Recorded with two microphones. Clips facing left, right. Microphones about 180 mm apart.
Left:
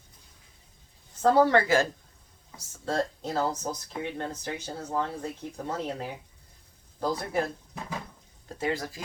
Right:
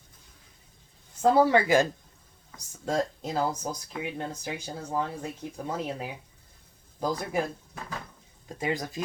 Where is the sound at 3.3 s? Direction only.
10° right (ahead or behind).